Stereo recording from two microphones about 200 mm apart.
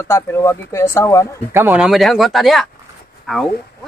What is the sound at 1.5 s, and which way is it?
Speech, 10° right (ahead or behind).